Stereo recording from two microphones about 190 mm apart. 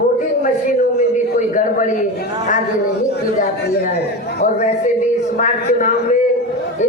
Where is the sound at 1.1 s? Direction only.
40° left (ahead or behind).